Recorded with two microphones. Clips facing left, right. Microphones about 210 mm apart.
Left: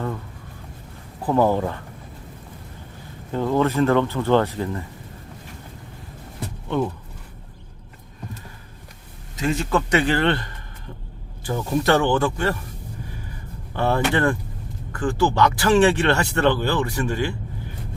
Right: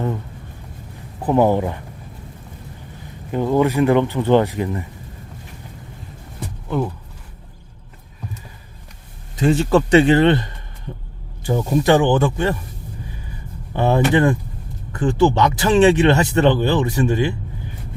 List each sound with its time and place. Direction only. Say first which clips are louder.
1.2 s speech: right 3 dB; 20° right (ahead or behind)
3.3 s speech: right 3 dB; 15° right (ahead or behind)
9.4 s speech: right 7 dB; 30° right (ahead or behind)
13.7 s speech: right 5 dB; 15° right (ahead or behind)